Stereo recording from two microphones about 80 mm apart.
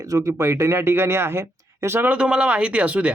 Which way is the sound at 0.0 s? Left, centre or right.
Right.